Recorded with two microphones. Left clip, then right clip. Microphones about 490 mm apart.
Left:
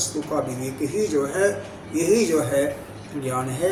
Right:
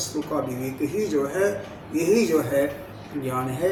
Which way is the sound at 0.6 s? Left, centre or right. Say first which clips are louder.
Left 2 dB; right.